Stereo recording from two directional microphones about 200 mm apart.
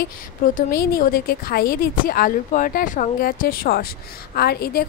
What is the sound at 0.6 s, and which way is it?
Speech, 50° left (ahead or behind).